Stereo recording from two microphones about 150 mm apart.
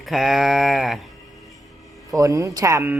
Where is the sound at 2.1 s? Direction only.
20° right (ahead or behind).